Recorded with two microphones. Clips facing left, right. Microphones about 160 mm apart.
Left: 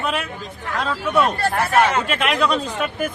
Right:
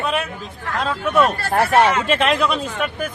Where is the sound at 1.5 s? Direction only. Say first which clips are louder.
Right 4 dB; 35° right (ahead or behind).